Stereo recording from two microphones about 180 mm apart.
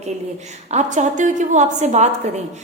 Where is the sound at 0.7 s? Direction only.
40° right (ahead or behind).